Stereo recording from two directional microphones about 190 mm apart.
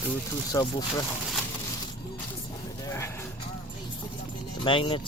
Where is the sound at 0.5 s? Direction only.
20° left (ahead or behind).